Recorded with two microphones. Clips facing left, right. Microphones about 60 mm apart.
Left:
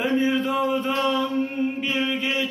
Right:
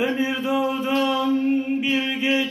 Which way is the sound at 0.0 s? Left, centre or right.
Centre.